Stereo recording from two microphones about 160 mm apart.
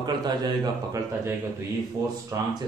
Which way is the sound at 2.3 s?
20° right (ahead or behind).